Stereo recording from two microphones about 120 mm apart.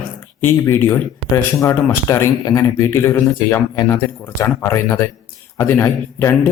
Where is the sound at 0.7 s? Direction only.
20° left (ahead or behind).